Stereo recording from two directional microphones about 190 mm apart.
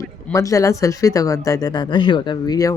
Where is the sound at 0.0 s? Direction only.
15° left (ahead or behind).